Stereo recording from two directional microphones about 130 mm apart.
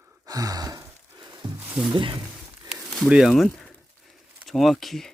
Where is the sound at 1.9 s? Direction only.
35° right (ahead or behind).